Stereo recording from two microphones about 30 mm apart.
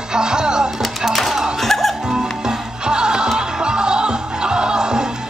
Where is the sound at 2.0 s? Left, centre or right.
Right.